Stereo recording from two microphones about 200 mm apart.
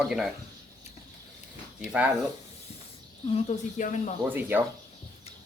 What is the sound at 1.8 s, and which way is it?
Speech, 5° right (ahead or behind).